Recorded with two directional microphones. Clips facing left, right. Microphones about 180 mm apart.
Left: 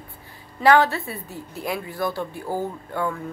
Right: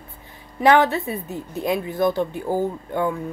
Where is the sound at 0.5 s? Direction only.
20° right (ahead or behind).